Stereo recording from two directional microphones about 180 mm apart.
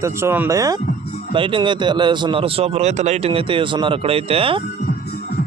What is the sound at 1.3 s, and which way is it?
A man's voice, 30° right (ahead or behind).